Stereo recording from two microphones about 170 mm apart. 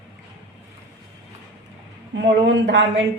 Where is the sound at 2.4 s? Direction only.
90° right.